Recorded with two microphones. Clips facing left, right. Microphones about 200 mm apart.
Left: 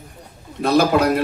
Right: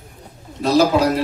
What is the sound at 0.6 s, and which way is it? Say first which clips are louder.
Speech: right 1 dB; 55° left (ahead or behind).